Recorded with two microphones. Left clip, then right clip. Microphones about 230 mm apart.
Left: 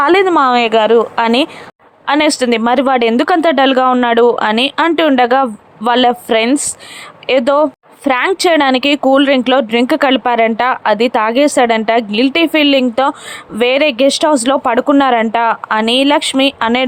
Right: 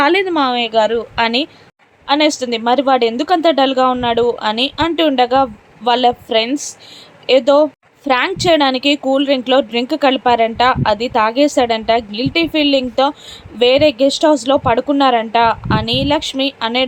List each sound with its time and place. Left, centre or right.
0.0 s speech: centre